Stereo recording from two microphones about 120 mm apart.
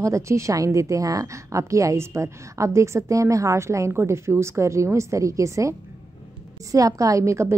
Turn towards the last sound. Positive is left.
turn(degrees=-25)  # may be behind; listen again after turning